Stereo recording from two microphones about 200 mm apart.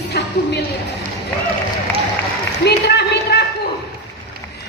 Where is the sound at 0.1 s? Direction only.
55° left (ahead or behind).